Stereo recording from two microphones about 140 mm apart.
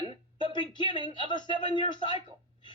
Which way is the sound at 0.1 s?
35° left (ahead or behind).